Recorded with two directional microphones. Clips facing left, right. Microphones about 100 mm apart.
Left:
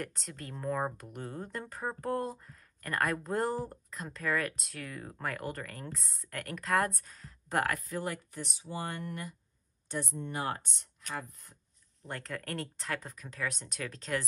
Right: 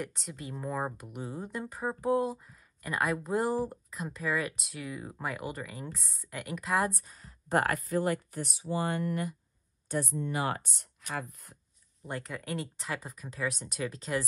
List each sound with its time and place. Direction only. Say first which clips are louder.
0.0 s speech: right 2 dB; 5° right (ahead or behind)
7.4 s speech: right 3 dB; 40° right (ahead or behind)
8.3 s speech: right 6 dB; 5° right (ahead or behind)
8.7 s speech: right 7 dB; 80° right
9.0 s speech: right 8 dB; 60° right (ahead or behind)
10.2 s speech: right 3 dB; 80° right
10.6 s speech: right 1 dB; 5° right (ahead or behind)
12.0 s speech: right 2 dB; 5° right (ahead or behind)